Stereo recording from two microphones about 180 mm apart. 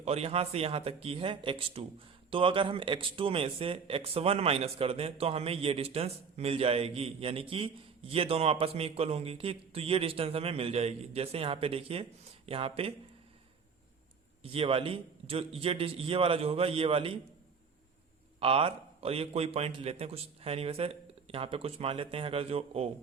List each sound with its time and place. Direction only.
0.0 s speech: 35° right (ahead or behind)
14.4 s speech: 30° right (ahead or behind)
18.3 s speech: 30° right (ahead or behind)